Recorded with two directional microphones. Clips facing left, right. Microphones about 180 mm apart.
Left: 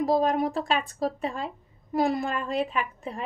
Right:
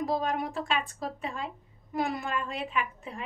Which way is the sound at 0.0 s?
40° left (ahead or behind).